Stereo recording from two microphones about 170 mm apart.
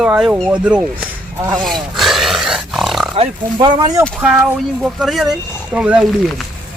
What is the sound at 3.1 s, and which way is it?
Speech, 30° right (ahead or behind).